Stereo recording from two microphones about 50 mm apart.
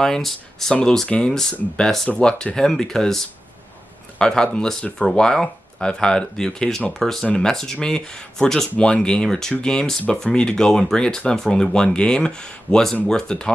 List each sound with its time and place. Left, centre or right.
0.0 s speech: centre
1.0 s speech: left
4.2 s speech: centre